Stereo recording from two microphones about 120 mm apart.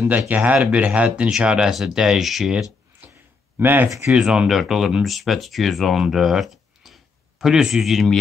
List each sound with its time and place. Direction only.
0.3 s speech: 10° right (ahead or behind)
3.0 s a sound: 15° right (ahead or behind)
3.5 s speech: 15° right (ahead or behind)
4.1 s speech: 5° right (ahead or behind)